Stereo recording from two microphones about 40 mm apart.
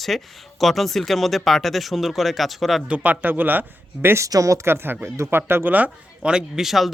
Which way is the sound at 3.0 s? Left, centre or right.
Right.